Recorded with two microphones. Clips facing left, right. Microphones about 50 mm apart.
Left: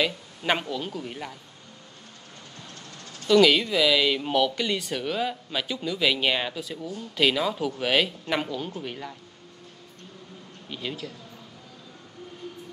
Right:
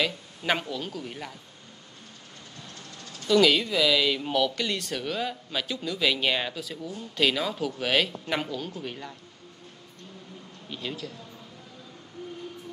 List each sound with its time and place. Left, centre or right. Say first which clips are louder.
0.4 s speech: left 2 dB; centre
3.0 s a sound: even; left
3.3 s speech: left 2 dB; centre
10.7 s speech: left 1 dB; centre